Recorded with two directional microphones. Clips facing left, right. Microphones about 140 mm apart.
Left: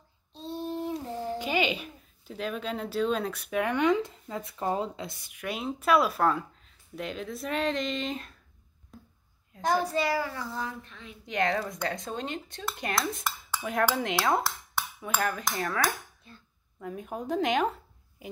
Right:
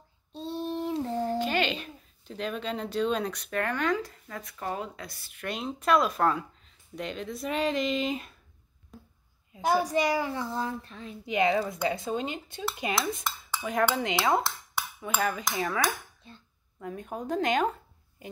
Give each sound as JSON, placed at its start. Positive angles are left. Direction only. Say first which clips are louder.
{"t": 1.4, "sound": "speech", "louder": "even", "side_deg": 10}
{"t": 8.9, "sound": "a sound", "louder": "right 1 dB", "side_deg": 0}
{"t": 9.5, "sound": "a woman's voice", "louder": "right 1 dB", "side_deg": -10}
{"t": 11.2, "sound": "speech", "louder": "right 3 dB", "side_deg": -5}
{"t": 16.3, "sound": "a woman's voice", "louder": "right 2 dB", "side_deg": -30}
{"t": 16.8, "sound": "speech", "louder": "even", "side_deg": 0}